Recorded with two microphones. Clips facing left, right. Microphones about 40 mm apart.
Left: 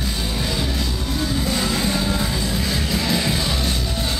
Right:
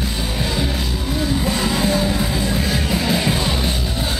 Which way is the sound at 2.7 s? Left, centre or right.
Centre.